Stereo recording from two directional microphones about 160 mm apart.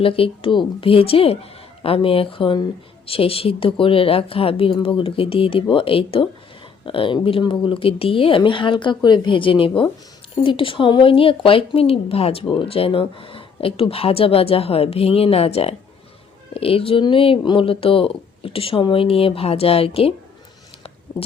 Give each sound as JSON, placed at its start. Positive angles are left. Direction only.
{"t": 0.0, "sound": "speech", "side_deg": 35}